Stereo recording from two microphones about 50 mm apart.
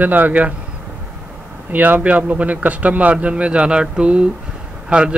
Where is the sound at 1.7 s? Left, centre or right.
Right.